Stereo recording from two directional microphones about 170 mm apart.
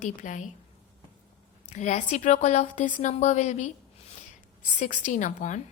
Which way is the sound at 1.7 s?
45° left (ahead or behind).